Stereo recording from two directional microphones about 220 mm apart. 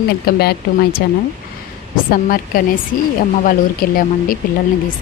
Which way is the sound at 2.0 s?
40° left (ahead or behind).